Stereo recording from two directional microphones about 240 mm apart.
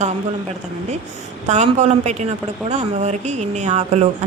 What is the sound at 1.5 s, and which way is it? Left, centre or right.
A woman's voice, right.